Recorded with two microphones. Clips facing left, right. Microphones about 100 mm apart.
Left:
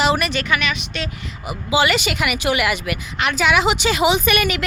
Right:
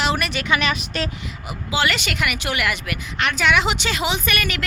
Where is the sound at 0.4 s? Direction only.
30° right (ahead or behind).